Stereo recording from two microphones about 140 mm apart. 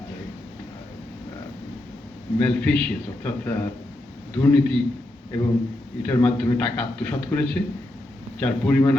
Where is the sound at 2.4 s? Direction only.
10° left (ahead or behind).